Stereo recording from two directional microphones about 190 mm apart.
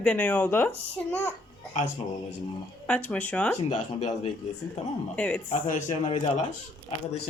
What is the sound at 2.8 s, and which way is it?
Speech, 5° left (ahead or behind).